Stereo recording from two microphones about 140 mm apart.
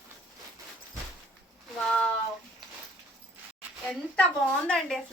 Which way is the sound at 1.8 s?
5° left (ahead or behind).